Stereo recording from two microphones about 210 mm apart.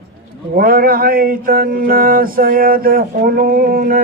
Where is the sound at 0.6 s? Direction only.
45° right (ahead or behind).